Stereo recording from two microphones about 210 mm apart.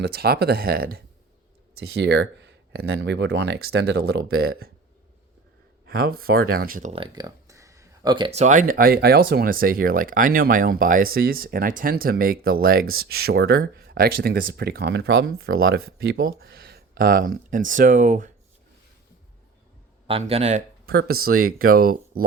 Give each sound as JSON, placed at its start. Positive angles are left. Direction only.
{"t": 0.0, "sound": "speech", "side_deg": -50}
{"t": 5.8, "sound": "speech", "side_deg": -45}
{"t": 6.9, "sound": "speech", "side_deg": -20}
{"t": 20.1, "sound": "speech", "side_deg": -25}
{"t": 20.8, "sound": "speech", "side_deg": -50}